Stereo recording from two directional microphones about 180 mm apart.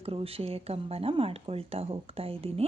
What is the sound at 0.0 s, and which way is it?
A woman's voice, 35° right (ahead or behind).